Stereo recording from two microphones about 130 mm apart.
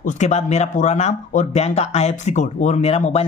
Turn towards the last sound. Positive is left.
turn(degrees=55)  # may be behind; listen again after turning